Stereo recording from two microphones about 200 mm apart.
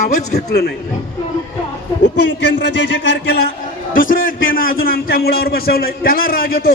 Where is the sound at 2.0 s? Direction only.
60° left (ahead or behind).